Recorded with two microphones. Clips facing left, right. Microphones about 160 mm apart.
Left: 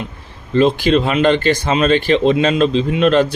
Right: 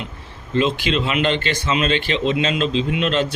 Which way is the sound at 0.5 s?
40° left (ahead or behind).